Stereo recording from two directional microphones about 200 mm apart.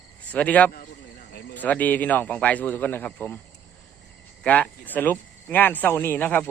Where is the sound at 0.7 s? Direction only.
45° left (ahead or behind).